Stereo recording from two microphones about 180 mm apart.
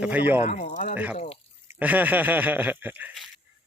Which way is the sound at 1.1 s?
35° left (ahead or behind).